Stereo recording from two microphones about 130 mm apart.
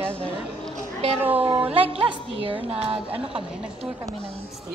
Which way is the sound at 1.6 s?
45° right (ahead or behind).